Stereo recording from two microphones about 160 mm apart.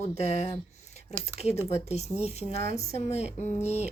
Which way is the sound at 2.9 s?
40° left (ahead or behind).